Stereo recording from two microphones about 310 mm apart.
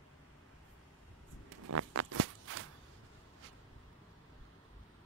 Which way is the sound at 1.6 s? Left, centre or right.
Right.